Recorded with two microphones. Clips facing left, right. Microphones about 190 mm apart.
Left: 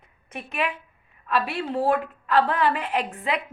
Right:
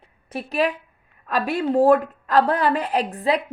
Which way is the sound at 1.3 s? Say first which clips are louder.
Right 4 dB; 40° right (ahead or behind).